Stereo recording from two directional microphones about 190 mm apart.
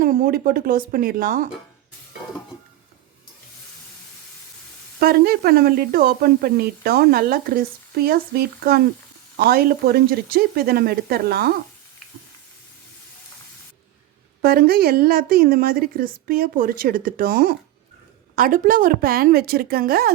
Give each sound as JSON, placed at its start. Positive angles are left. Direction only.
{"t": 0.0, "sound": "speech", "side_deg": -45}
{"t": 4.9, "sound": "speech", "side_deg": -55}
{"t": 14.4, "sound": "speech", "side_deg": -55}